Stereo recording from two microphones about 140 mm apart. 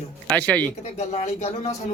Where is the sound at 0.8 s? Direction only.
55° left (ahead or behind).